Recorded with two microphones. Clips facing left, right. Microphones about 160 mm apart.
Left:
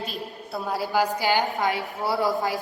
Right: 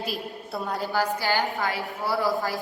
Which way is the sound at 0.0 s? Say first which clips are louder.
Right 1 dB; centre (ahead or behind).